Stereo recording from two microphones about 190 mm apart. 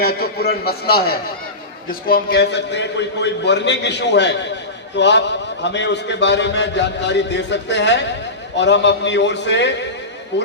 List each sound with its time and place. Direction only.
0.0 s a man's voice: 55° left (ahead or behind)